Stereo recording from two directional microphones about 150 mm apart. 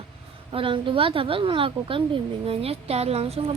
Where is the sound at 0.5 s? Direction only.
35° right (ahead or behind).